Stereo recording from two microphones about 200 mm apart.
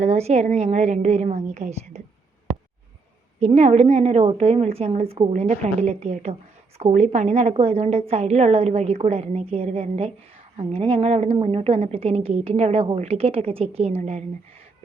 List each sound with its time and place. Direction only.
0.0 s a woman's voice: 35° right (ahead or behind)
3.4 s a woman's voice: 35° right (ahead or behind)